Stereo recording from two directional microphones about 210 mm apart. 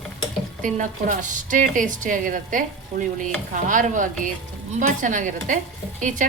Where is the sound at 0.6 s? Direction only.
35° right (ahead or behind).